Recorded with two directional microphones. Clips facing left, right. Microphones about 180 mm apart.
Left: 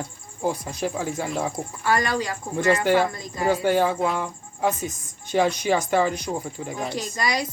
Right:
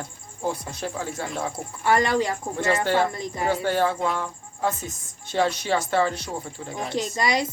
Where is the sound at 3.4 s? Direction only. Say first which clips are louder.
Left 3 dB; 15° left (ahead or behind).